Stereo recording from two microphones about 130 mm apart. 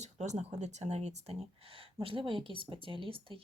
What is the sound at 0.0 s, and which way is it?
Speech, 65° right (ahead or behind).